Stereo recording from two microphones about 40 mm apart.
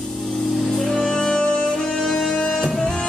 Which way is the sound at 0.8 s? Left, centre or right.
Centre.